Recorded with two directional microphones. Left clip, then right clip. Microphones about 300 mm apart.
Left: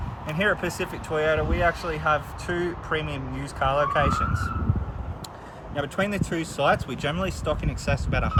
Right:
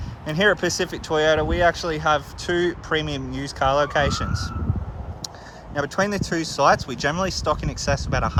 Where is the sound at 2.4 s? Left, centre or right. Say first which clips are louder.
Right 6 dB; right.